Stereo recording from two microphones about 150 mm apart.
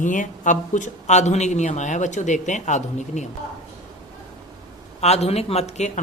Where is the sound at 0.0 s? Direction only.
60° left (ahead or behind).